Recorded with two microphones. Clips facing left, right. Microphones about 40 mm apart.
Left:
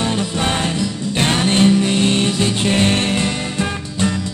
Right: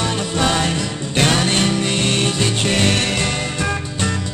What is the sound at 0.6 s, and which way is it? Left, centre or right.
Music, right.